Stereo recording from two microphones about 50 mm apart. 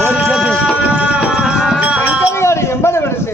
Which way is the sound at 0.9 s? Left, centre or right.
Right.